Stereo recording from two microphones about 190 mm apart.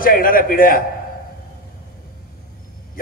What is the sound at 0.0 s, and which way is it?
Speech, 50° left (ahead or behind).